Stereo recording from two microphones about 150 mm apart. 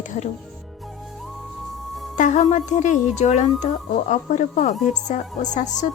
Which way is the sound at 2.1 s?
55° left (ahead or behind).